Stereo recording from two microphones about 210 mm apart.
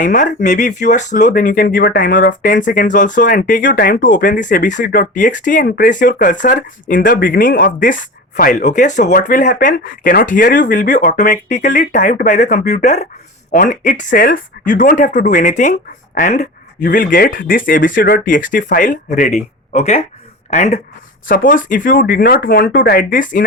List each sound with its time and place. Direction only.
0.0 s speech: 40° left (ahead or behind)